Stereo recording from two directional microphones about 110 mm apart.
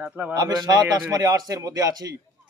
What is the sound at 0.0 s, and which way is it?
Speech, 15° right (ahead or behind).